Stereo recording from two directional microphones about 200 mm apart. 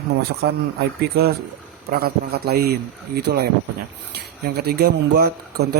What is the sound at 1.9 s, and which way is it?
A man's voice, 50° right (ahead or behind).